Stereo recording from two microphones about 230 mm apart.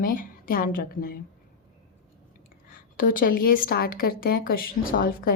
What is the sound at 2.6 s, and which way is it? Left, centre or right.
A woman's voice, left.